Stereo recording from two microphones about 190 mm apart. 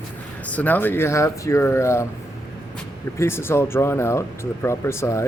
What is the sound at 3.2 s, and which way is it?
Speech, 15° left (ahead or behind).